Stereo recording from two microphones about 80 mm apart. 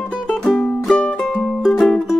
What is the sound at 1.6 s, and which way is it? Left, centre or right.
Music, centre.